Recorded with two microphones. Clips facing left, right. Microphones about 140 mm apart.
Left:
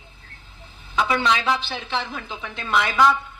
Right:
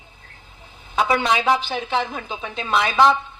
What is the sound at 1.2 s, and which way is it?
Speech, 45° right (ahead or behind).